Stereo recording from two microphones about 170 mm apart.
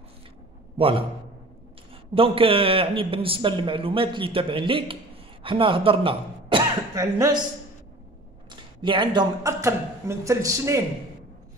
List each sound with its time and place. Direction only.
0.7 s a man's voice: 35° right (ahead or behind)
2.1 s a man's voice: 35° right (ahead or behind)
8.5 s a woman's voice: 30° right (ahead or behind)